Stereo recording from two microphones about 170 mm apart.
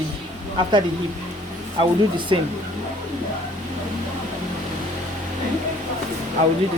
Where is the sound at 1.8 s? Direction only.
30° right (ahead or behind).